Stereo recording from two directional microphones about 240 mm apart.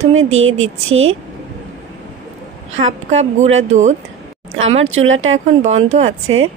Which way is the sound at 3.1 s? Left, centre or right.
Right.